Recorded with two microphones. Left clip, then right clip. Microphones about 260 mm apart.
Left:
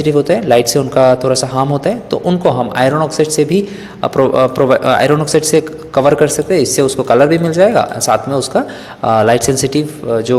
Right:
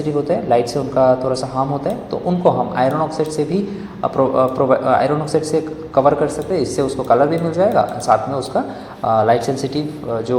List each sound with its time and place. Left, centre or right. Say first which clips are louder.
0.0 s a man's voice: left 7 dB; left